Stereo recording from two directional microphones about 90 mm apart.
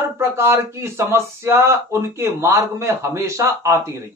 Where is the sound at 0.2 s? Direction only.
30° right (ahead or behind).